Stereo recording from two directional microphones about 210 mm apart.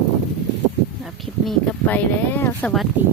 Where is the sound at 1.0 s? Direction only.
Centre (ahead or behind).